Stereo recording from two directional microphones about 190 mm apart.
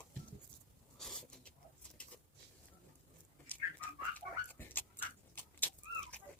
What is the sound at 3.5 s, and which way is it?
Dog, 10° left (ahead or behind).